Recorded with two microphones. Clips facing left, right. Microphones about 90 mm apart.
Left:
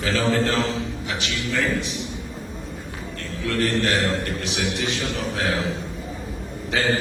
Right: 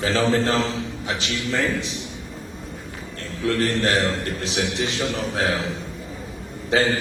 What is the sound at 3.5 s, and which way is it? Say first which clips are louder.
A man's voice: right 1 dB; 35° right (ahead or behind).